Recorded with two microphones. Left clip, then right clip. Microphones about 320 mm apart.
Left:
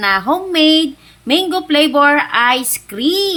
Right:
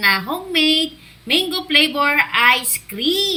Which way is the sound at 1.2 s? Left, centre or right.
Centre.